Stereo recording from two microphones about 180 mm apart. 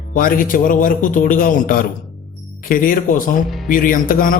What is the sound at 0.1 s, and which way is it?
Speech, 50° left (ahead or behind).